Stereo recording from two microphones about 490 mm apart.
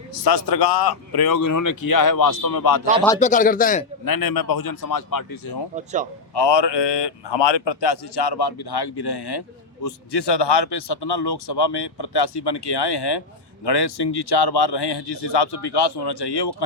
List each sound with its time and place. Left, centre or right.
0.3 s speech: left
3.0 s speech: centre
4.0 s a man's voice: left
5.7 s speech: centre
6.3 s speech: left